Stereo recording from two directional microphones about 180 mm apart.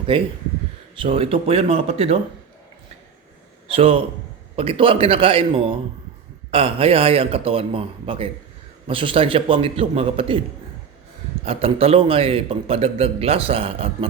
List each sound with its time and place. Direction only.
0.1 s a man's voice: 30° right (ahead or behind)
3.7 s a man's voice: 30° right (ahead or behind)
11.4 s a man's voice: 30° right (ahead or behind)